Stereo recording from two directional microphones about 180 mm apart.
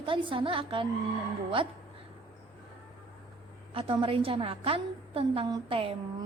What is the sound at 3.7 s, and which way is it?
A woman's voice, 30° right (ahead or behind).